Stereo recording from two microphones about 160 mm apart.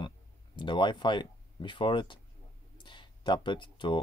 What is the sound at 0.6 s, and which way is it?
Speech, 30° left (ahead or behind).